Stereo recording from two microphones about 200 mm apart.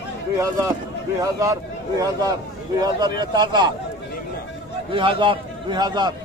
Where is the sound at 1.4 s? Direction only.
15° right (ahead or behind).